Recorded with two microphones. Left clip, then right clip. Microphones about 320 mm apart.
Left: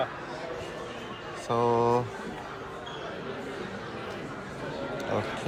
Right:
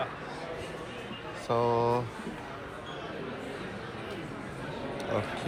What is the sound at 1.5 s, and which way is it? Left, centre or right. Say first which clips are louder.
Speech: left 2 dB; centre.